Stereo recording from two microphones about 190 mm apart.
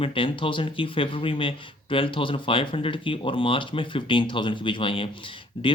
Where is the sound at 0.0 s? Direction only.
30° left (ahead or behind).